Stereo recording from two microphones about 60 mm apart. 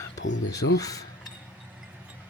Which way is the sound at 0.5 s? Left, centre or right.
Left.